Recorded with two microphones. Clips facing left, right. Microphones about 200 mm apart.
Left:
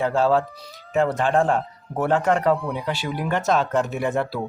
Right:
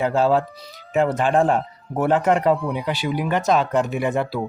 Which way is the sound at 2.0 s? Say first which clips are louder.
Right 2 dB; 5° right (ahead or behind).